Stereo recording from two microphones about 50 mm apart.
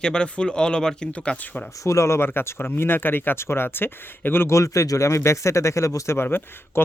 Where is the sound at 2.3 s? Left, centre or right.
Left.